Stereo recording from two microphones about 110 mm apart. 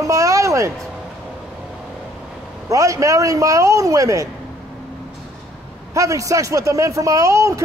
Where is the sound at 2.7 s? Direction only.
30° right (ahead or behind).